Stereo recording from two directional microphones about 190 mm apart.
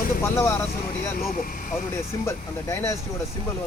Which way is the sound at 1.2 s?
45° left (ahead or behind).